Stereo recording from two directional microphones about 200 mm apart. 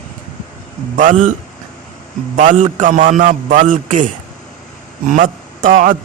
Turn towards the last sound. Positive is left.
turn(degrees=-40)  # may be behind; listen again after turning